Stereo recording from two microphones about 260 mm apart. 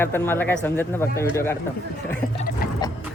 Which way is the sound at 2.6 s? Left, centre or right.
Left.